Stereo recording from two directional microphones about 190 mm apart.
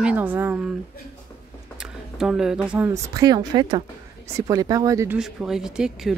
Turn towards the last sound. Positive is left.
turn(degrees=-5)  # may be behind; listen again after turning